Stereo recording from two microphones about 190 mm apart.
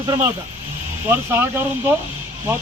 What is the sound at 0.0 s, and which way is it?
Speech, 15° right (ahead or behind).